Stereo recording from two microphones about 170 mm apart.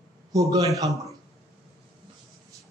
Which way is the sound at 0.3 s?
20° right (ahead or behind).